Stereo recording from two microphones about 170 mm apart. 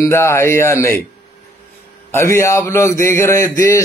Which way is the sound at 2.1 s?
15° left (ahead or behind).